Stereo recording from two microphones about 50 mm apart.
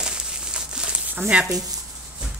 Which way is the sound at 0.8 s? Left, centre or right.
Right.